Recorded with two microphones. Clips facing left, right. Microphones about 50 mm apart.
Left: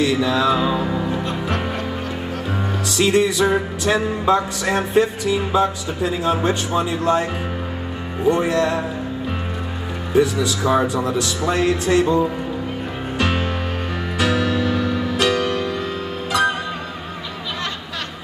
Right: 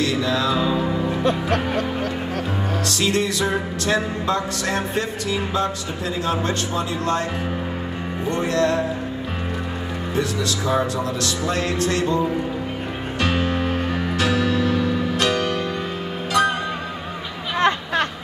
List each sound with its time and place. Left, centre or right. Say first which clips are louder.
0.0 s music: left 3 dB; centre
2.9 s music: left 6 dB; centre
8.3 s music: left 3 dB; centre
10.1 s music: left 7 dB; centre
13.2 s music: right 1 dB; centre
17.6 s a sound: right 13 dB; right